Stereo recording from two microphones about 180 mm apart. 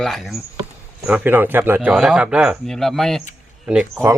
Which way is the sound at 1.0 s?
10° right (ahead or behind).